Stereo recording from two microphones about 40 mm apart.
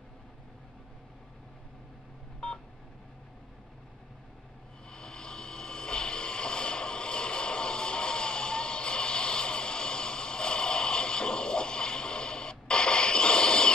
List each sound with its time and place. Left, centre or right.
4.8 s vehicle: left